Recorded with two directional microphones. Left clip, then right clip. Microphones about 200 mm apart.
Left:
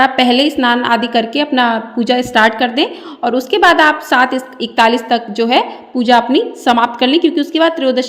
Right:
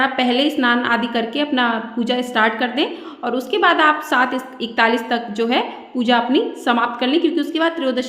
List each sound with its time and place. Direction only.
0.0 s a woman's voice: 30° left (ahead or behind)